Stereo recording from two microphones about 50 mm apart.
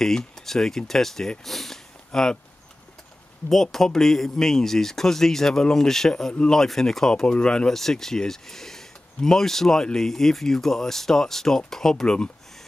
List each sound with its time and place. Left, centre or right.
0.0 s speech: centre
3.7 s speech: centre
6.3 s speech: centre
6.6 s speech: centre
7.7 s speech: centre